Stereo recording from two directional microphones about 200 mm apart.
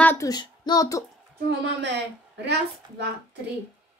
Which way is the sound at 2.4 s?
60° right (ahead or behind).